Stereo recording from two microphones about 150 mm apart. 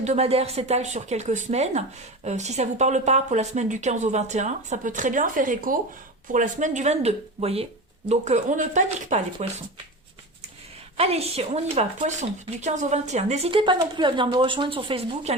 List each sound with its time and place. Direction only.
0.0 s speech: 45° right (ahead or behind)
10.9 s a woman's voice: 40° right (ahead or behind)